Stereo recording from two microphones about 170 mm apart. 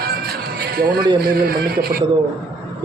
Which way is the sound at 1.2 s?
60° right (ahead or behind).